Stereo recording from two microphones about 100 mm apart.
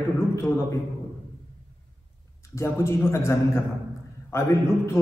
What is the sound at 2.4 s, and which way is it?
A man's voice, 30° left (ahead or behind).